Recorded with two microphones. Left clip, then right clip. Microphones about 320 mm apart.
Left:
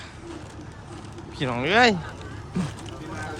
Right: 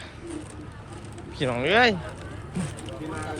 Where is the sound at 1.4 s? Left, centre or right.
Centre.